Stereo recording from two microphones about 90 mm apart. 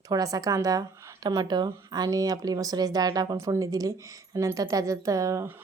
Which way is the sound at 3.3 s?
35° right (ahead or behind).